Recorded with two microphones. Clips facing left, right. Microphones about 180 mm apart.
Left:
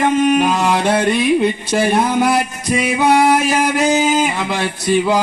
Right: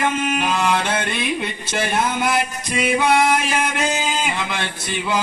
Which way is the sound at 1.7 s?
35° left (ahead or behind).